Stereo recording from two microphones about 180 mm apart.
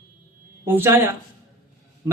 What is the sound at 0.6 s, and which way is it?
Speech, 10° right (ahead or behind).